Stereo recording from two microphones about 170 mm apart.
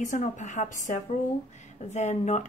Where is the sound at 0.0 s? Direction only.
45° left (ahead or behind).